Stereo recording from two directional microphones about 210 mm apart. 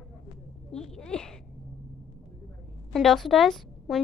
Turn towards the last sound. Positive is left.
turn(degrees=0)  # may be behind; listen again after turning